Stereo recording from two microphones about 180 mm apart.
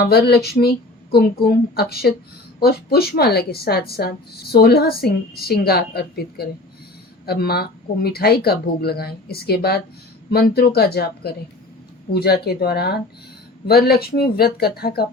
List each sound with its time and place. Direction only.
0.0 s a woman's voice: 60° left (ahead or behind)